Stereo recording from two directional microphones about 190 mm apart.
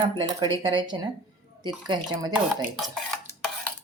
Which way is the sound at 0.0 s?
25° right (ahead or behind).